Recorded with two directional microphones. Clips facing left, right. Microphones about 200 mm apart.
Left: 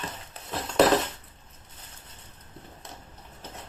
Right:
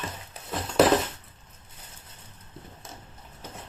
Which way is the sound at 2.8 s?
Centre (ahead or behind).